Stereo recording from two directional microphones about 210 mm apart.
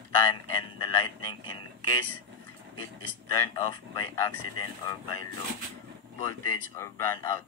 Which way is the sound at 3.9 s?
20° left (ahead or behind).